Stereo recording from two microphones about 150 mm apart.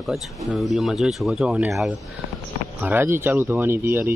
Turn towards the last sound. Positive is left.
turn(degrees=-15)  # may be behind; listen again after turning